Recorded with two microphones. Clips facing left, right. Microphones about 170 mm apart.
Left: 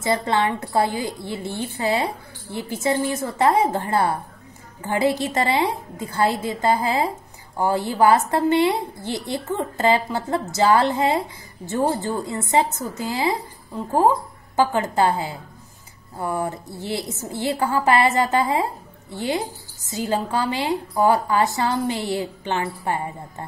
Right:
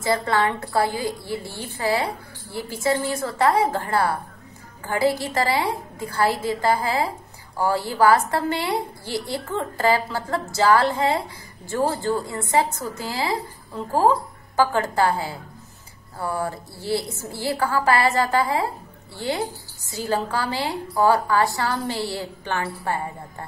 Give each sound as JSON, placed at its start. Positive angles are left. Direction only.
{"t": 0.0, "sound": "a woman's voice", "side_deg": 20}